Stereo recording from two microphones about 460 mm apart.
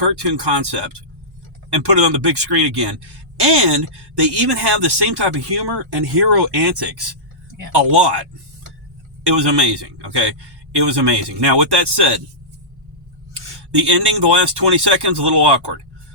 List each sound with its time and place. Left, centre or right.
0.0 s a man's voice: right
9.2 s a man's voice: right
13.7 s a man's voice: right